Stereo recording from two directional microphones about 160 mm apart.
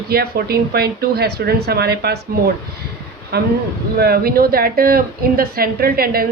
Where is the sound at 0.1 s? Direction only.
75° right (ahead or behind); by 2.1 s 90° right.